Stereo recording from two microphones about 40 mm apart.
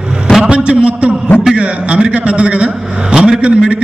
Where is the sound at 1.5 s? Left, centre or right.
Right.